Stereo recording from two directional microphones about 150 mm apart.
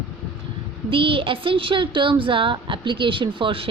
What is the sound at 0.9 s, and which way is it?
A woman's voice, 35° right (ahead or behind).